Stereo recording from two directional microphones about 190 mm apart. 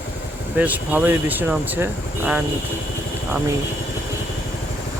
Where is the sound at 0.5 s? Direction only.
10° right (ahead or behind).